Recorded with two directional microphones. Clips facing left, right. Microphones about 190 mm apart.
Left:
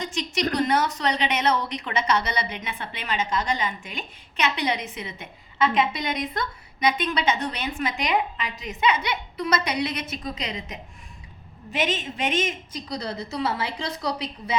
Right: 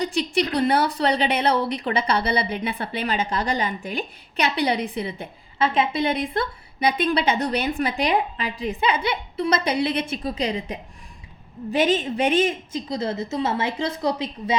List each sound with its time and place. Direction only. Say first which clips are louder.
0.0 s a woman's voice: right 4 dB; 35° right (ahead or behind)